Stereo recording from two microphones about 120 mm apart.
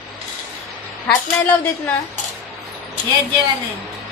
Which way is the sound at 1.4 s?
15° left (ahead or behind).